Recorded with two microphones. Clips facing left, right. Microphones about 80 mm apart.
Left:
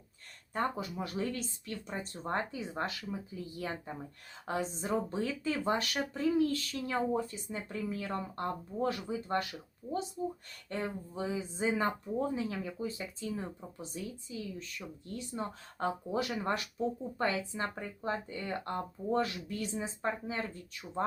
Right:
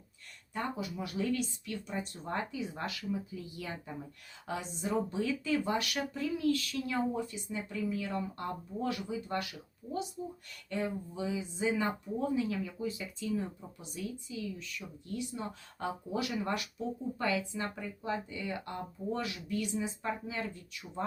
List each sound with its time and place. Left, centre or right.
0.5 s speech: left